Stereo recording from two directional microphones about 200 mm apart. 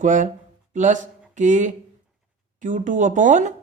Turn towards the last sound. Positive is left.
turn(degrees=-40)  # may be behind; listen again after turning